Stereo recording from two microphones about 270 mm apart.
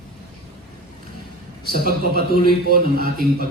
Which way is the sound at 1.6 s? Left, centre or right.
Right.